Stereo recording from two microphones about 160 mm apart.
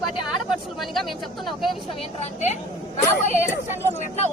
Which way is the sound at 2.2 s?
45° left (ahead or behind).